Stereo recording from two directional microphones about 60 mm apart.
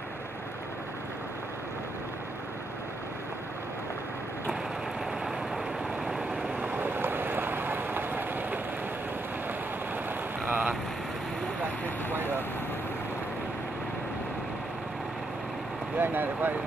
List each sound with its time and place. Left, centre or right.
6.6 s vehicle: right
10.4 s vehicle: right
11.6 s vehicle: right
16.0 s speech: right